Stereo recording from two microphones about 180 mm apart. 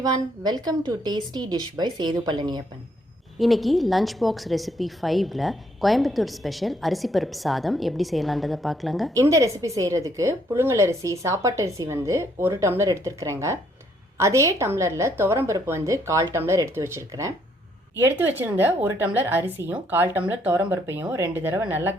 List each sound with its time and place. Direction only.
0.0 s a woman's voice: 25° right (ahead or behind)
3.3 s a woman's voice: centre (ahead or behind)
9.1 s a woman's voice: 15° right (ahead or behind)